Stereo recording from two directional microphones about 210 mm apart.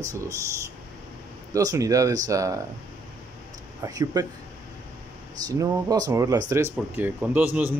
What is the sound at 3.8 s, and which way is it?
Speech, 20° right (ahead or behind).